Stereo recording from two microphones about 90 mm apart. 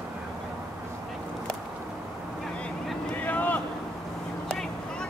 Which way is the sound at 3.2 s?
20° left (ahead or behind).